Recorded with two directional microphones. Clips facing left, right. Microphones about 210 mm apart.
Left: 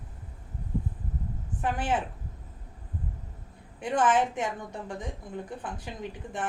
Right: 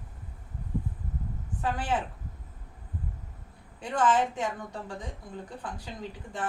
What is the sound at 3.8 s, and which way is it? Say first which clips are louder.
A woman's voice: left 1 dB; 20° left (ahead or behind).